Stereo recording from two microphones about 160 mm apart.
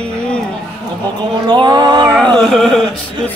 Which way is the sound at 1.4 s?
25° right (ahead or behind).